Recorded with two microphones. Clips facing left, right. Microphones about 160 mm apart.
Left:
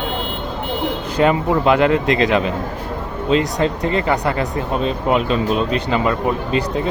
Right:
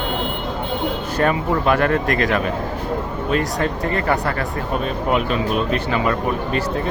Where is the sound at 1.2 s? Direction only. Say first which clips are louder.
Left 4 dB; 20° left (ahead or behind).